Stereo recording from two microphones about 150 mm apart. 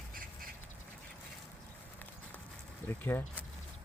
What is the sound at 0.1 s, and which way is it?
Duck, 70° right (ahead or behind).